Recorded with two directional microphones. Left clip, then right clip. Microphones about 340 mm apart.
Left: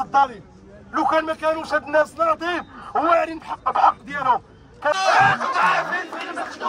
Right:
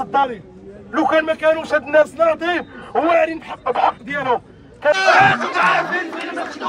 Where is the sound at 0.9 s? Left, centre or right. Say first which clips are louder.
Right 4 dB; centre.